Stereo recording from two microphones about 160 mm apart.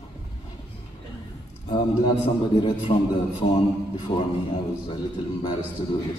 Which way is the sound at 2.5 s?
35° left (ahead or behind).